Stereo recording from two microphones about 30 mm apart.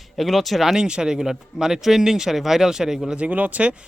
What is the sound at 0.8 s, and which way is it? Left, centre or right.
Speech, right.